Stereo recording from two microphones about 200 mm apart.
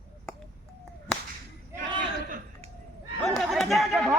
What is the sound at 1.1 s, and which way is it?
Whip, 5° left (ahead or behind).